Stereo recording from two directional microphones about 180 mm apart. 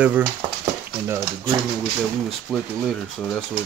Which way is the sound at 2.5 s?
Centre (ahead or behind).